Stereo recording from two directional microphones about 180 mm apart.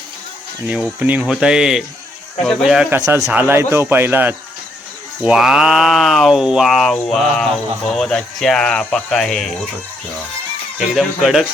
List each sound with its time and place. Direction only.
0.9 s speech: 10° right (ahead or behind)
3.0 s speech: 20° right (ahead or behind); by 9.6 s centre (ahead or behind)
10.8 s speech: centre (ahead or behind)